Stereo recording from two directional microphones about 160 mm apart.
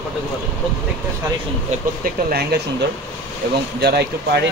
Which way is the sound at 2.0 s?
75° right (ahead or behind).